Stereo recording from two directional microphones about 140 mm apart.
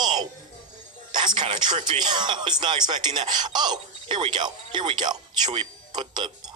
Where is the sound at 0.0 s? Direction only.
30° right (ahead or behind).